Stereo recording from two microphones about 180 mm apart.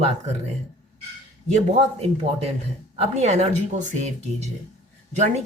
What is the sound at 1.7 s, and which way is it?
Speech, 35° right (ahead or behind).